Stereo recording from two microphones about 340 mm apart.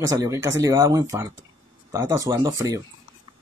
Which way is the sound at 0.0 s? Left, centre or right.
Centre.